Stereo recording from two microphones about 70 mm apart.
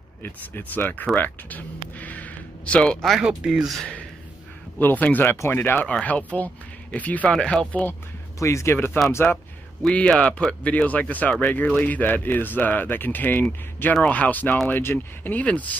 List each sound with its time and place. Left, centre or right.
0.2 s speech: left
3.1 s speech: centre
4.7 s speech: left
8.4 s speech: left
8.7 s speech: left
10.1 s speech: centre